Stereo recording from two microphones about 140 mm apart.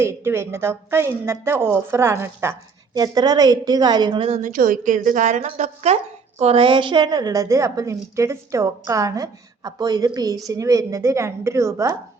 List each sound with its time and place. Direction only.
0.0 s a woman's voice: 20° right (ahead or behind)
3.0 s a woman's voice: 30° right (ahead or behind)
4.4 s a woman's voice: 75° right (ahead or behind); by 6.0 s 55° right (ahead or behind)
6.4 s a woman's voice: 40° right (ahead or behind); by 11.9 s 20° right (ahead or behind)